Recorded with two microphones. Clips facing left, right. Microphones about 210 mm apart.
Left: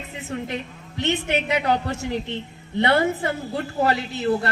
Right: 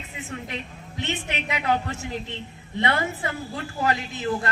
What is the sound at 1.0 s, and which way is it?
A woman's voice, 40° left (ahead or behind).